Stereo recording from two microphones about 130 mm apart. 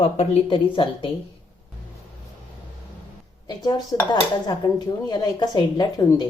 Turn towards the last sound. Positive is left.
turn(degrees=30)  # may be behind; listen again after turning